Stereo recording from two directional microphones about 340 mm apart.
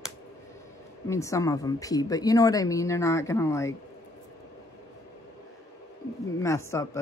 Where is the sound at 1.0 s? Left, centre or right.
Centre.